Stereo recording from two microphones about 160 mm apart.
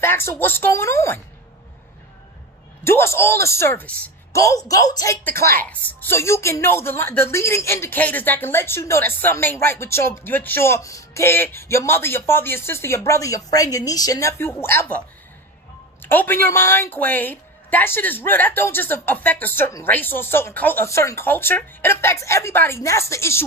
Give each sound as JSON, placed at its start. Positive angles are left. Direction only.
{"t": 0.0, "sound": "a woman's voice", "side_deg": 15}
{"t": 2.8, "sound": "a woman's voice", "side_deg": 15}
{"t": 4.4, "sound": "a woman's voice", "side_deg": 20}